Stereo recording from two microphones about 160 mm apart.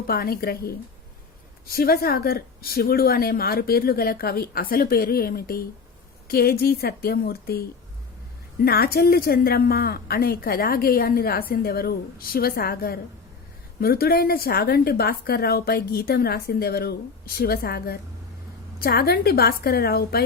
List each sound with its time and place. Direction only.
0.1 s a woman's voice: 70° left (ahead or behind)
8.6 s a woman's voice: 75° left (ahead or behind)